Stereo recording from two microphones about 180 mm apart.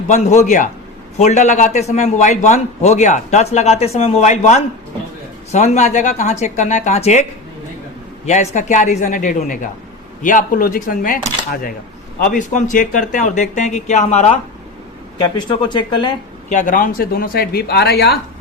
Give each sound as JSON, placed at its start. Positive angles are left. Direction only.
{"t": 0.1, "sound": "a man's voice", "side_deg": 40}
{"t": 8.3, "sound": "a man's voice", "side_deg": 40}
{"t": 15.2, "sound": "speech", "side_deg": 25}
{"t": 16.5, "sound": "speech", "side_deg": 45}